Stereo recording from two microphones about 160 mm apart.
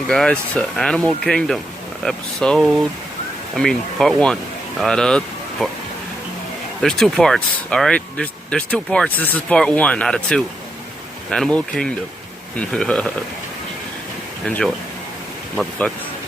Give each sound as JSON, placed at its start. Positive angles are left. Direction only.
{"t": 0.1, "sound": "speech", "side_deg": 5}
{"t": 6.8, "sound": "speech", "side_deg": 5}
{"t": 14.4, "sound": "speech", "side_deg": 5}